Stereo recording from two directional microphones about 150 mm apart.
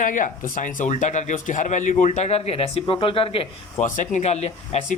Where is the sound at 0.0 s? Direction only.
60° left (ahead or behind); by 3.4 s 40° left (ahead or behind).